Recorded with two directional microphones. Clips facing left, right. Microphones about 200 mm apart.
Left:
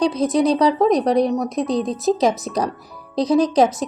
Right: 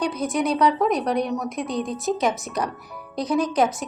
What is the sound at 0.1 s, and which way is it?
Speech, 35° left (ahead or behind).